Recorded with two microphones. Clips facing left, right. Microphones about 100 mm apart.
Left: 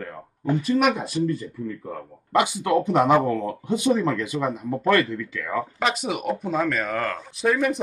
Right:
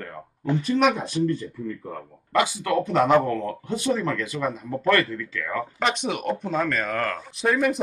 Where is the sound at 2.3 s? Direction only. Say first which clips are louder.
Left 2 dB; 20° left (ahead or behind).